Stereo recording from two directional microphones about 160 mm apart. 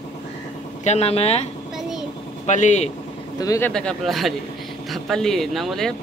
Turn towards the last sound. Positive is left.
turn(degrees=0)  # may be behind; listen again after turning